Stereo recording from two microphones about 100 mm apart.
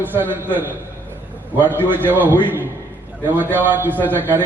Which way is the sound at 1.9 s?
20° right (ahead or behind).